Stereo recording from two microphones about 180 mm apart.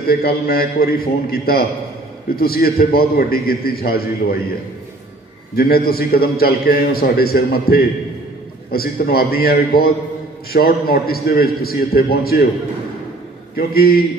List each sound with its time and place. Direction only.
0.1 s a man's voice: 60° left (ahead or behind)
5.6 s a man's voice: 60° left (ahead or behind)
13.6 s a man's voice: 60° left (ahead or behind)